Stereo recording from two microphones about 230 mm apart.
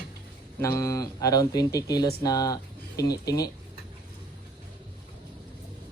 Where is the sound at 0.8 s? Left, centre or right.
Centre.